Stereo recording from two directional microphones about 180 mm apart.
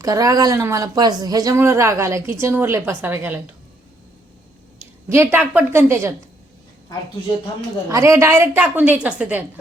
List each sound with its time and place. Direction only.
0.0 s a woman's voice: 20° right (ahead or behind)
5.0 s a woman's voice: 15° right (ahead or behind)
7.9 s a woman's voice: 15° right (ahead or behind)